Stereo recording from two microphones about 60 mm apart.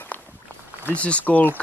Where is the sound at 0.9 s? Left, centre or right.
Left.